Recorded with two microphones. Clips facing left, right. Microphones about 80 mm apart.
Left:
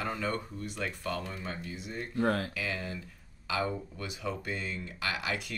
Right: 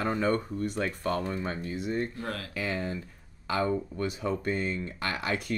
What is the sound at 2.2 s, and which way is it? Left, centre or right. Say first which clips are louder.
Speech: left 7 dB; left.